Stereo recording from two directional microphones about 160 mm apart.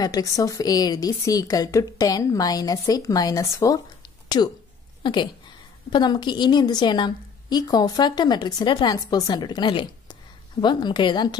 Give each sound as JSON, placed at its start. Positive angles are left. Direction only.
{"t": 0.0, "sound": "a woman's voice", "side_deg": 25}